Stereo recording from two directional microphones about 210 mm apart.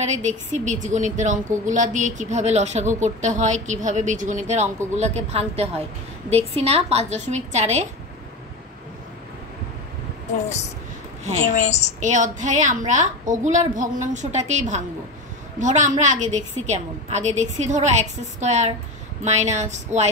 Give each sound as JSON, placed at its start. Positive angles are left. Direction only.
{"t": 0.0, "sound": "a woman's voice", "side_deg": -35}
{"t": 11.5, "sound": "a woman's voice", "side_deg": 35}
{"t": 12.0, "sound": "a woman's voice", "side_deg": -35}